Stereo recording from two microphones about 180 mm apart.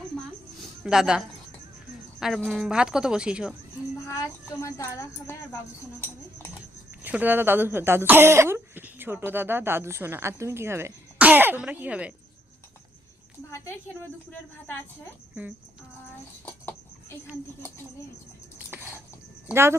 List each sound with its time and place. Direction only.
0.9 s a woman's voice: 5° right (ahead or behind)
4.0 s speech: 15° left (ahead or behind)
7.0 s speech: 10° right (ahead or behind)
13.5 s speech: 10° left (ahead or behind)
18.7 s a sound: 10° right (ahead or behind)